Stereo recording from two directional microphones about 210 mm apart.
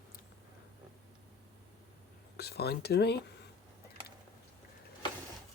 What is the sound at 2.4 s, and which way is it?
Speech, 50° left (ahead or behind).